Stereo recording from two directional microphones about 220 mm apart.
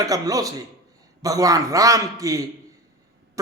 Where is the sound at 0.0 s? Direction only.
15° right (ahead or behind).